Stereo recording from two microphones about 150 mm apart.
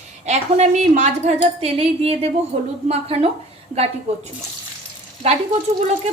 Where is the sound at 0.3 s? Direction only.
50° right (ahead or behind).